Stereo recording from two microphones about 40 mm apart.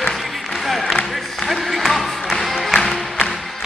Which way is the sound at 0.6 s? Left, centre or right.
Centre.